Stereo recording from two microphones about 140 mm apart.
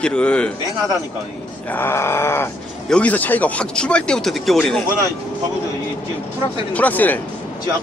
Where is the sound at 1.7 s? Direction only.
15° left (ahead or behind).